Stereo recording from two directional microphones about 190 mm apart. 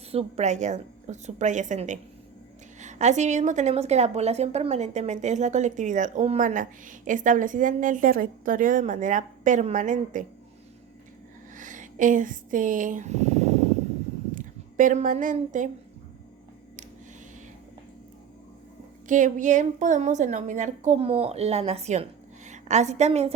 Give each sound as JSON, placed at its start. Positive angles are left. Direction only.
{"t": 0.1, "sound": "a woman's voice", "side_deg": -35}
{"t": 11.5, "sound": "a sound", "side_deg": -40}
{"t": 14.3, "sound": "a woman's voice", "side_deg": -45}
{"t": 19.0, "sound": "a woman's voice", "side_deg": -40}